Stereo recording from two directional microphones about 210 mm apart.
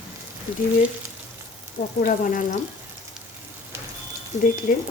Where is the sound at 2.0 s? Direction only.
40° left (ahead or behind).